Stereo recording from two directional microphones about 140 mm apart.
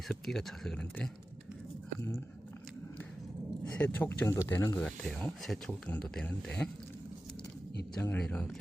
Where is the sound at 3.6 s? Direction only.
10° left (ahead or behind).